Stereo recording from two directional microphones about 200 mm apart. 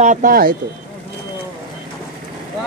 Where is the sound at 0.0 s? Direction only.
40° right (ahead or behind).